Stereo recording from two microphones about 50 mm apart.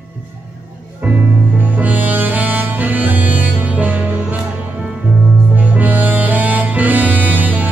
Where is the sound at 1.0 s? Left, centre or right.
Right.